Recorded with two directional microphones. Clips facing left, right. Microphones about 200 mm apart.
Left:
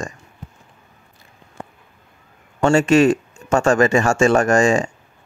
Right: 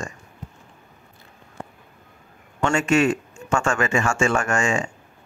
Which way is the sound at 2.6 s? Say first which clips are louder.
Left 6 dB; 35° left (ahead or behind).